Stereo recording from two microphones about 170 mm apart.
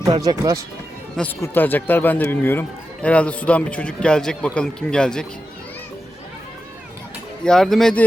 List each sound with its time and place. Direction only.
0.0 s speech: 20° right (ahead or behind)
1.4 s a man's voice: 10° left (ahead or behind)
7.4 s speech: 5° left (ahead or behind)